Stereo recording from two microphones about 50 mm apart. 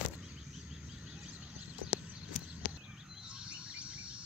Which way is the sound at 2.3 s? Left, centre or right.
Centre.